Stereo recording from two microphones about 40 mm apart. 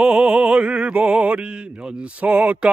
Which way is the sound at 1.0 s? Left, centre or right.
Right.